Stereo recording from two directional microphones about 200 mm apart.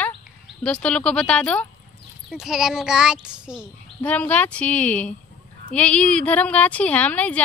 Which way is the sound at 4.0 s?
5° left (ahead or behind).